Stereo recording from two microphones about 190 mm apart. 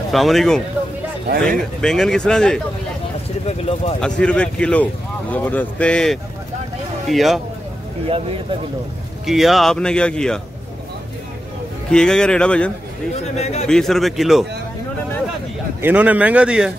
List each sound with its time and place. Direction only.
0.1 s a man's voice: centre (ahead or behind)
1.8 s a man's voice: centre (ahead or behind)
3.4 s speech: 30° left (ahead or behind)
4.0 s a man's voice: 5° left (ahead or behind)
9.2 s a man's voice: centre (ahead or behind)
11.9 s a man's voice: 5° left (ahead or behind)
13.4 s speech: 35° left (ahead or behind)
13.7 s a man's voice: centre (ahead or behind)
15.8 s speech: 10° right (ahead or behind)